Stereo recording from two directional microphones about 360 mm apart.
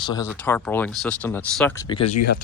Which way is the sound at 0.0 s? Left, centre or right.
Centre.